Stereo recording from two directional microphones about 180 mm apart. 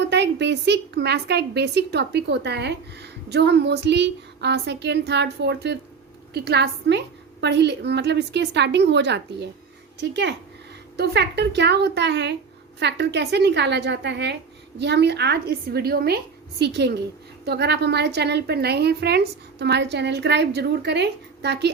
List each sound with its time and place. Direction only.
0.1 s a woman's voice: 75° right (ahead or behind)